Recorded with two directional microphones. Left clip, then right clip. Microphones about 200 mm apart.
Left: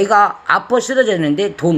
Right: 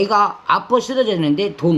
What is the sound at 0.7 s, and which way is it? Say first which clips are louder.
Speech: left 3 dB; 20° right (ahead or behind).